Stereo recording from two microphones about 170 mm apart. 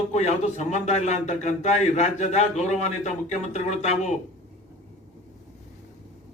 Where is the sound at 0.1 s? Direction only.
40° left (ahead or behind).